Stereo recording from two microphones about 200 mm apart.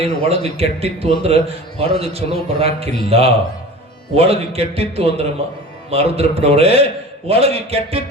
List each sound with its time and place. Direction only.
0.0 s a man's voice: 30° right (ahead or behind)